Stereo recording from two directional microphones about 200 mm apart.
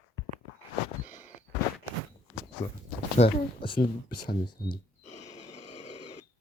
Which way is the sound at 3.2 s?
25° left (ahead or behind).